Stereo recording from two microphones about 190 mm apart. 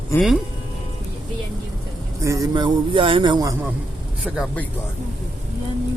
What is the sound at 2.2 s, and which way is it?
A man's voice, 15° right (ahead or behind).